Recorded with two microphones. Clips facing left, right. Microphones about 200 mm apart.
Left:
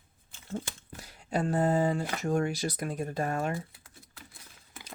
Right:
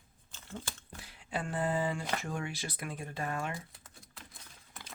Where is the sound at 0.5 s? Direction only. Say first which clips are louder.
Left 7 dB; 40° left (ahead or behind).